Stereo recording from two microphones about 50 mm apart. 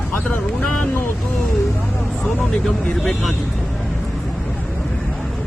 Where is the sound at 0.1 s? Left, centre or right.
Left.